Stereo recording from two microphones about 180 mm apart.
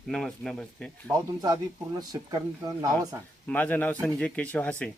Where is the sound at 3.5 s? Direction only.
10° left (ahead or behind).